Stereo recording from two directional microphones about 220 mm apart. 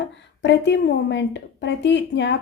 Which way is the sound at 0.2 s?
55° left (ahead or behind).